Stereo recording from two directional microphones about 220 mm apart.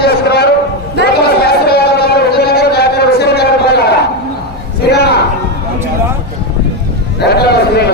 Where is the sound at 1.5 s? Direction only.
45° left (ahead or behind).